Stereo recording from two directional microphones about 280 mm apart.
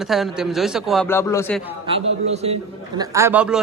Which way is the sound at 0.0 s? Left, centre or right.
Centre.